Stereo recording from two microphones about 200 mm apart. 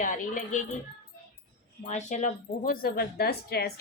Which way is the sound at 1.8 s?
35° left (ahead or behind).